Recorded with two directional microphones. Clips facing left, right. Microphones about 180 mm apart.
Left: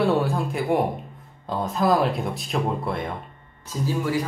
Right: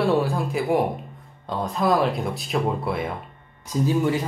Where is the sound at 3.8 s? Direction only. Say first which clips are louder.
Right 2 dB; 25° right (ahead or behind).